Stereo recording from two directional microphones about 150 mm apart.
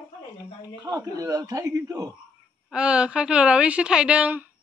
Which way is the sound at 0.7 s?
25° right (ahead or behind).